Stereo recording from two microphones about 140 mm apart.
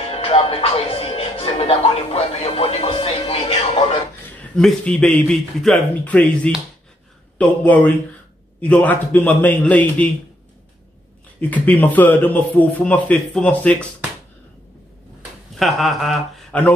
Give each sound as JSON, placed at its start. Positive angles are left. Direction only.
{"t": 0.1, "sound": "speech", "side_deg": 45}
{"t": 4.4, "sound": "a man's voice", "side_deg": 5}
{"t": 11.5, "sound": "a man's voice", "side_deg": 10}
{"t": 15.6, "sound": "a man's voice", "side_deg": 0}